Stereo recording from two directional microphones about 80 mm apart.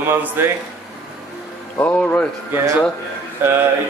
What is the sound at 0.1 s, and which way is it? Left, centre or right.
Speech, right.